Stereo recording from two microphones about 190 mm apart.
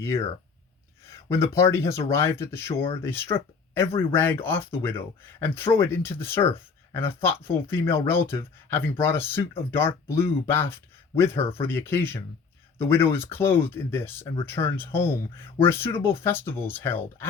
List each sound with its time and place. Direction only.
0.0 s speech: 15° left (ahead or behind)